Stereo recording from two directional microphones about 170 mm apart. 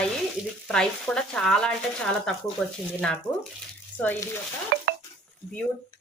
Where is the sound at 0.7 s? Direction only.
5° left (ahead or behind).